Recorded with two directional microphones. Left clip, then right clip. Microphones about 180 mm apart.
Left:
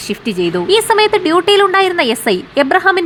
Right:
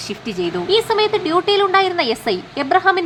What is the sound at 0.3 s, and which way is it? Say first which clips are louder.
A woman's voice: left 4 dB; 20° left (ahead or behind).